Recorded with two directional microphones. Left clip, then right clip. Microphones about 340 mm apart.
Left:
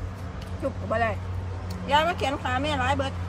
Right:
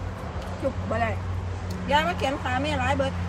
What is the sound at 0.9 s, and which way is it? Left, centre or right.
Speech, centre.